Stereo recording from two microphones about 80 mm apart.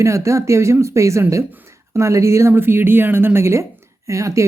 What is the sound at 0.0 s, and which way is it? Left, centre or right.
Speech, right.